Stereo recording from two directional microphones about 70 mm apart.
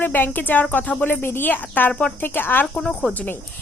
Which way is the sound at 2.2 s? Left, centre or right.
Left.